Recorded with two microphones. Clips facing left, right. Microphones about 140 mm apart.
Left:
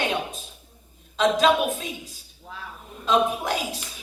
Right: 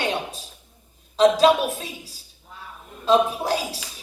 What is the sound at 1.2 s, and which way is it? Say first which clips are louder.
A woman's voice: right 4 dB; 35° right (ahead or behind).